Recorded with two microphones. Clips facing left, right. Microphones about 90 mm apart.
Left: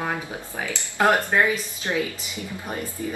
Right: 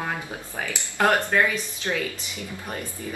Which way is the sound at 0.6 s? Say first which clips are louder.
Left 2 dB; 15° left (ahead or behind).